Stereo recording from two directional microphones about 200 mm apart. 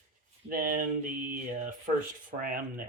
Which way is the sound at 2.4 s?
45° right (ahead or behind).